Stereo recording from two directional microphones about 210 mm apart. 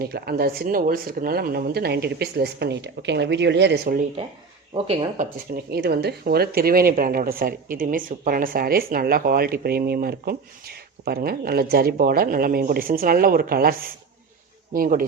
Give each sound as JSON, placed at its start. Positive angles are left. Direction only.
{"t": 0.0, "sound": "speech", "side_deg": -50}
{"t": 4.7, "sound": "speech", "side_deg": -25}